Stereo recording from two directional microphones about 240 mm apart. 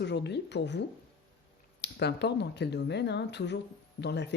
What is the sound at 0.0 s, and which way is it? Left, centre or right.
Speech, left.